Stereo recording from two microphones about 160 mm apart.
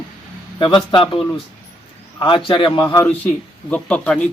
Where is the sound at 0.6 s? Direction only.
30° left (ahead or behind).